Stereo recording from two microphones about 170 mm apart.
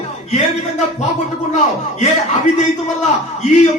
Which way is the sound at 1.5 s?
45° left (ahead or behind).